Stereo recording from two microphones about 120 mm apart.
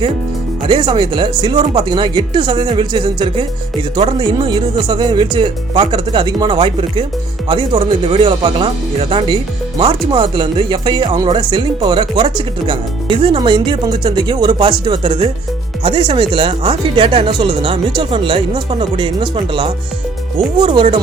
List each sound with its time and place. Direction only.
0.7 s speech: 35° right (ahead or behind)